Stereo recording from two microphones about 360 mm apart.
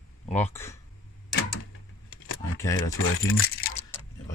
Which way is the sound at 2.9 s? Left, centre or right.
Left.